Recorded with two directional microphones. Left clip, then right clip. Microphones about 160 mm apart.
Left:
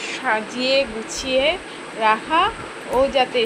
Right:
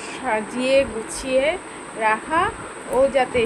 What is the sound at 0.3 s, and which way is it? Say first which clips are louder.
Speech: even; 25° right (ahead or behind).